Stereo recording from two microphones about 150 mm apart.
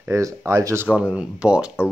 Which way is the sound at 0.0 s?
15° right (ahead or behind).